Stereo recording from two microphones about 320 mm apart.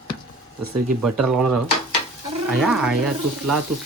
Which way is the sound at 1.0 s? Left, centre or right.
Centre.